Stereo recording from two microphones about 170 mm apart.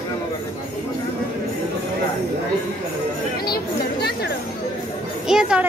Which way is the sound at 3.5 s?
70° left (ahead or behind).